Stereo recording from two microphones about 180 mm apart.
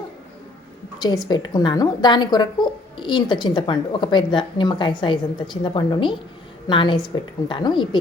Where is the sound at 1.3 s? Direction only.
25° left (ahead or behind).